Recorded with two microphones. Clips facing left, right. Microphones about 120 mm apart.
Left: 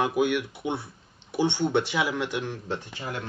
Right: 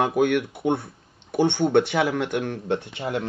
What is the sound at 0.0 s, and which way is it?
Speech, 55° right (ahead or behind).